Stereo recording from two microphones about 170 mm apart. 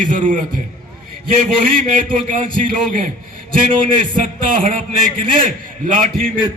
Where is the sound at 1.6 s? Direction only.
50° right (ahead or behind).